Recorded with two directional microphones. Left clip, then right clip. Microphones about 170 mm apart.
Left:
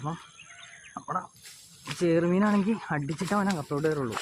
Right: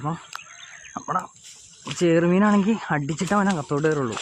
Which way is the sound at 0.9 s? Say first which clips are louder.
Right 6 dB; 55° right (ahead or behind).